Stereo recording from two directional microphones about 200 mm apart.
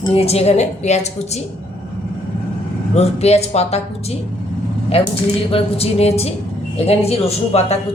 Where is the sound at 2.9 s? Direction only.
30° left (ahead or behind).